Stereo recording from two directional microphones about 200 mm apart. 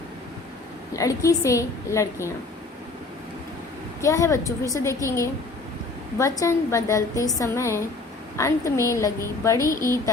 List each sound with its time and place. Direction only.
0.9 s a woman's voice: 15° left (ahead or behind)
4.0 s a woman's voice: 15° left (ahead or behind)